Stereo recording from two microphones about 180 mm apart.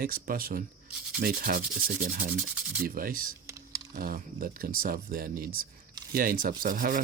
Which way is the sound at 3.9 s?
50° right (ahead or behind).